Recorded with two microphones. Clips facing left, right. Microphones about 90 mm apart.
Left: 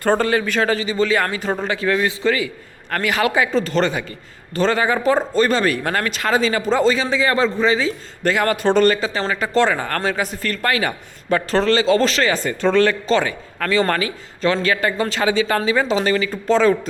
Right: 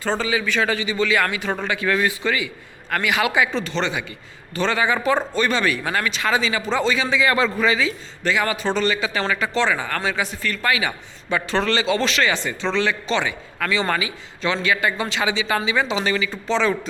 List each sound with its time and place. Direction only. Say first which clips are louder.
0.0 s a man's voice: left 5 dB; 55° left (ahead or behind)
9.0 s a man's voice: left 1 dB; 35° left (ahead or behind)